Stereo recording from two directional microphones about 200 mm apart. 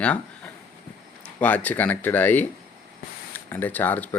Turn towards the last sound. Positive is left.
turn(degrees=10)  # may be behind; listen again after turning